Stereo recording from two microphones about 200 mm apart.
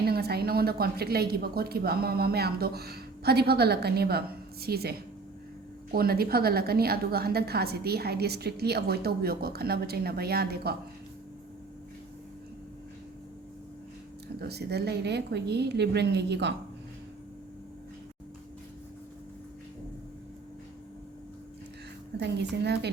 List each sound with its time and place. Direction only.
0.0 s a woman's voice: 50° right (ahead or behind)
14.3 s a woman's voice: 55° right (ahead or behind)
22.2 s a woman's voice: 60° right (ahead or behind)